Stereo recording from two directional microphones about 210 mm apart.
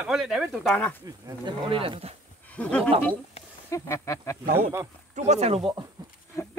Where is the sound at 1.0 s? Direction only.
20° right (ahead or behind).